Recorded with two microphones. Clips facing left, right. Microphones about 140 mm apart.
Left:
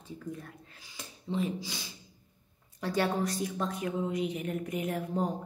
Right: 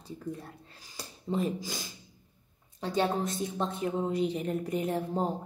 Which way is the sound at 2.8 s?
20° right (ahead or behind).